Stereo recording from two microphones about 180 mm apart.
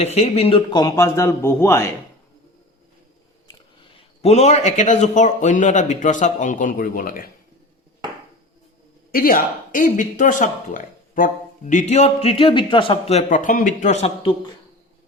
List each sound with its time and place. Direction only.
0.0 s a man's voice: 35° left (ahead or behind); by 1.9 s 15° left (ahead or behind)
3.9 s a man's voice: 35° left (ahead or behind); by 7.3 s 50° left (ahead or behind)
9.1 s speech: 50° left (ahead or behind); by 14.3 s 35° left (ahead or behind)